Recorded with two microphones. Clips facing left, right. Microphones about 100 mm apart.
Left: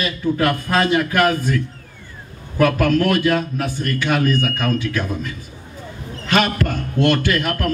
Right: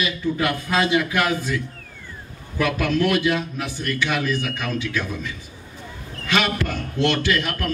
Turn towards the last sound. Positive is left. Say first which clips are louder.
# left 3 dB
turn(degrees=45)  # may be behind; listen again after turning